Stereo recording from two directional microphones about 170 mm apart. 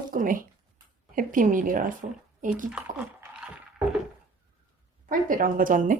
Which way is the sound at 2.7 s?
5° right (ahead or behind).